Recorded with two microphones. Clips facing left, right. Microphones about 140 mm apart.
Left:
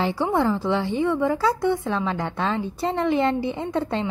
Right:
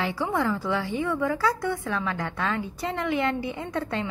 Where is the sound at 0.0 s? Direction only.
30° left (ahead or behind).